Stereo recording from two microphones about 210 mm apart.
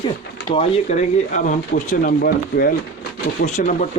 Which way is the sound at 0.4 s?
30° left (ahead or behind).